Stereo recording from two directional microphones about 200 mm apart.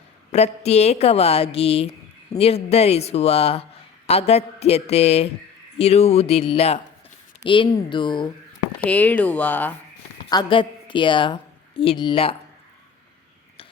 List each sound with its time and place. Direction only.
0.3 s a woman's voice: 35° left (ahead or behind)
8.9 s speech: 10° left (ahead or behind)
10.2 s a woman's voice: 25° left (ahead or behind)